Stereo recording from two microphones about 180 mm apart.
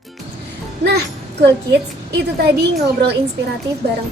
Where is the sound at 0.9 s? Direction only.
65° right (ahead or behind).